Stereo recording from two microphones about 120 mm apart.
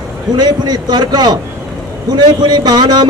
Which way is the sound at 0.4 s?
35° right (ahead or behind).